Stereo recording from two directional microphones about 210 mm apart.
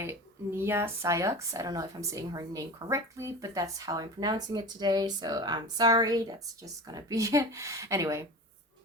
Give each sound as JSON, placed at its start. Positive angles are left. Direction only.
{"t": 0.0, "sound": "speech", "side_deg": -10}